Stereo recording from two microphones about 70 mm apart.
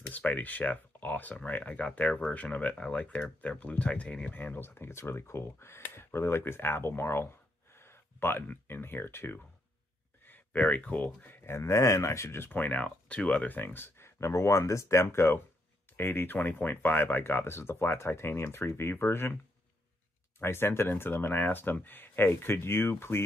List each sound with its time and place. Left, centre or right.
0.1 s speech: left
10.2 s a sound: left
11.2 s speech: left
20.3 s speech: left